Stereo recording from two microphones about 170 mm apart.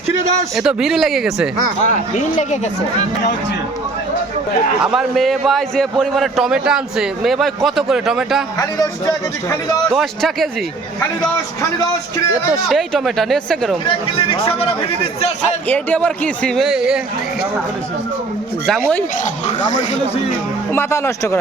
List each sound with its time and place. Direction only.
0.5 s a man's voice: 5° right (ahead or behind)
1.9 s speech: 45° left (ahead or behind)
4.8 s a man's voice: 5° right (ahead or behind)
8.5 s a man's voice: 20° left (ahead or behind)
9.9 s a man's voice: centre (ahead or behind)
12.3 s a man's voice: 5° right (ahead or behind)
13.8 s speech: 30° left (ahead or behind)
15.7 s a man's voice: 10° left (ahead or behind)
18.6 s a man's voice: 5° left (ahead or behind)
20.7 s a man's voice: 15° left (ahead or behind)